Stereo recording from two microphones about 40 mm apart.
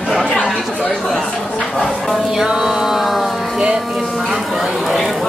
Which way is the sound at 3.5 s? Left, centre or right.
Centre.